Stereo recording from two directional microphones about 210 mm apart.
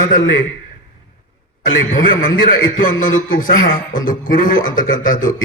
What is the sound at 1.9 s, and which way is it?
A man's voice, 40° left (ahead or behind).